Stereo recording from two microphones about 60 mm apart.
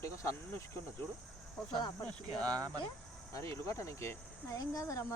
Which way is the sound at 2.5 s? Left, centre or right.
Right.